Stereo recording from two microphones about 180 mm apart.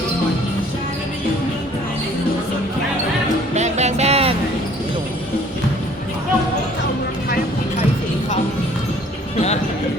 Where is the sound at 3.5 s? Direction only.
40° right (ahead or behind).